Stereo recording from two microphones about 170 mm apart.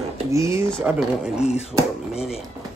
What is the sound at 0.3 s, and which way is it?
Speech, 15° right (ahead or behind).